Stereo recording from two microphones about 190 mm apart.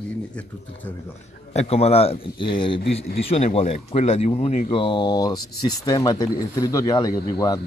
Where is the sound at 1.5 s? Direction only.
30° left (ahead or behind).